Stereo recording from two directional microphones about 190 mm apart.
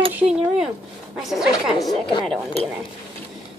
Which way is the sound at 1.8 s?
25° left (ahead or behind).